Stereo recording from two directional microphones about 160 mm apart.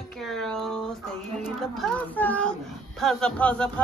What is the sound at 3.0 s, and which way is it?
Speech, 5° left (ahead or behind).